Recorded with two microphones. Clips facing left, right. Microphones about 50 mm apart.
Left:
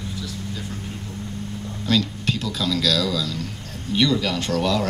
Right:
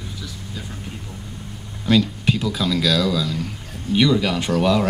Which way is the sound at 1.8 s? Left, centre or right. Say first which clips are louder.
Right 4 dB; centre.